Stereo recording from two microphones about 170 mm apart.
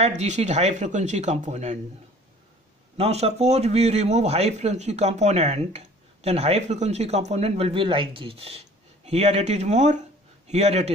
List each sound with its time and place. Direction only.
0.0 s speech: 40° right (ahead or behind)
3.0 s speech: 40° right (ahead or behind)